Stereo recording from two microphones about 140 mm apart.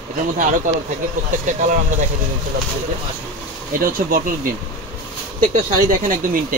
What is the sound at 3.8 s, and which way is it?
Speech, 85° right.